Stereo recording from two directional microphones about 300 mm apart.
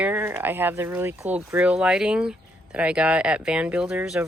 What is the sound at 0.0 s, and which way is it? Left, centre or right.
Speech, centre.